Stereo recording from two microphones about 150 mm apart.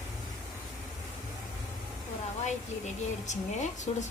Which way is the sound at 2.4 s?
50° left (ahead or behind).